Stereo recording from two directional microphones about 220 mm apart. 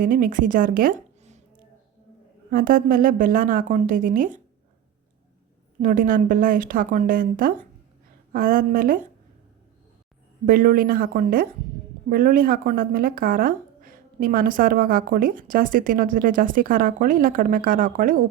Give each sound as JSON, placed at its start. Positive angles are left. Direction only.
{"t": 0.0, "sound": "speech", "side_deg": -40}
{"t": 2.5, "sound": "speech", "side_deg": -40}
{"t": 5.8, "sound": "speech", "side_deg": -35}
{"t": 10.4, "sound": "speech", "side_deg": -40}